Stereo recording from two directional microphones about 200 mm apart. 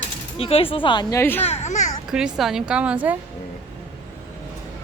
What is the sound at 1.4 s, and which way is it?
Speech, 35° left (ahead or behind).